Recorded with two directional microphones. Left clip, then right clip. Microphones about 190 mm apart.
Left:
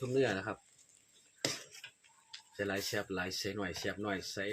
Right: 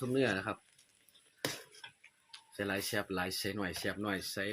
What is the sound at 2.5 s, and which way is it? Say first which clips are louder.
Speech: right 1 dB; 25° right (ahead or behind).